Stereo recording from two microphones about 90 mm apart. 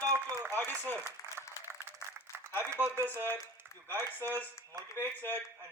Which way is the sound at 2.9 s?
20° left (ahead or behind).